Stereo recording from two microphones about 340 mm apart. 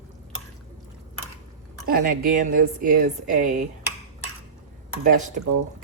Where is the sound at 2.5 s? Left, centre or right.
Right.